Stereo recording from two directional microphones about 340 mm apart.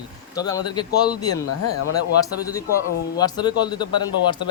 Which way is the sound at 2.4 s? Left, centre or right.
Centre.